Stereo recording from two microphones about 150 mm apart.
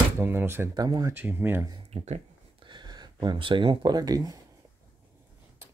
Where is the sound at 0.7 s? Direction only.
25° right (ahead or behind).